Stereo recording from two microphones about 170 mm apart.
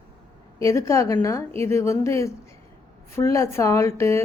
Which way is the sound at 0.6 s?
20° left (ahead or behind).